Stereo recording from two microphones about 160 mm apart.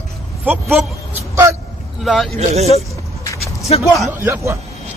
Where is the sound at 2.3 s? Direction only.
45° right (ahead or behind).